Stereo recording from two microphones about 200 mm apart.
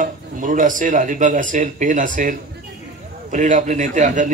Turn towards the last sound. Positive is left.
turn(degrees=-40)  # may be behind; listen again after turning